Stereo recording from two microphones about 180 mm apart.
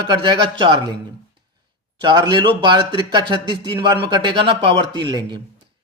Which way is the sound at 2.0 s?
25° right (ahead or behind).